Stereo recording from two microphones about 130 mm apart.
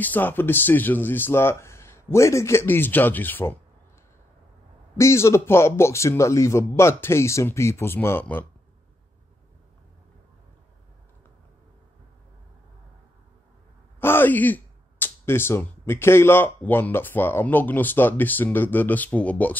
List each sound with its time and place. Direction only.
0.0 s speech: 15° left (ahead or behind)
4.9 s a man's voice: 20° left (ahead or behind)
13.9 s speech: 15° left (ahead or behind)